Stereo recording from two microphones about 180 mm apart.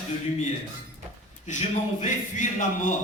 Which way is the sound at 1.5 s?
45° left (ahead or behind).